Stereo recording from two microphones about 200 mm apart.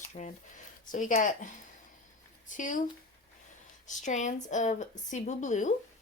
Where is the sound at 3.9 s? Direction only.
40° left (ahead or behind).